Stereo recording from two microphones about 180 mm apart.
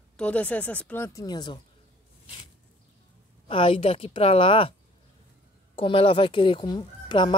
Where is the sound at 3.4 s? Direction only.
30° left (ahead or behind).